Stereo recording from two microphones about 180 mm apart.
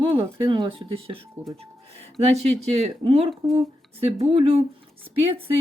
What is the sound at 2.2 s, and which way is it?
Speech, 35° right (ahead or behind).